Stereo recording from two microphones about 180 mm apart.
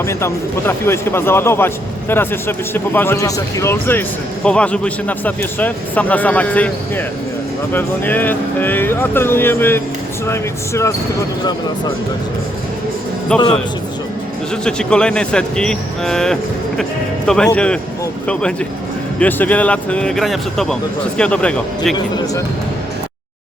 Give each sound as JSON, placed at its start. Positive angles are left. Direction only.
{"t": 0.0, "sound": "speech", "side_deg": 15}
{"t": 13.3, "sound": "speech", "side_deg": 5}
{"t": 14.5, "sound": "speech", "side_deg": 5}
{"t": 21.9, "sound": "speech", "side_deg": 25}